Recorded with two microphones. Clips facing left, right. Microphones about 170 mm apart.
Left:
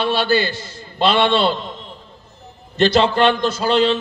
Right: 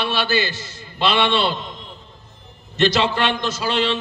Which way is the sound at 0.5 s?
55° left (ahead or behind).